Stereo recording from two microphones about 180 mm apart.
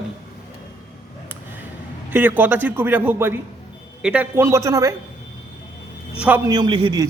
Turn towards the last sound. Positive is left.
turn(degrees=-25)  # may be behind; listen again after turning